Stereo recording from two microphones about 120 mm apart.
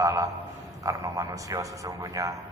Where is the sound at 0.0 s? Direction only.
25° right (ahead or behind).